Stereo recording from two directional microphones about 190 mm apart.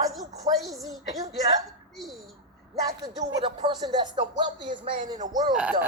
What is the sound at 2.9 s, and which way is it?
Speech, 20° right (ahead or behind).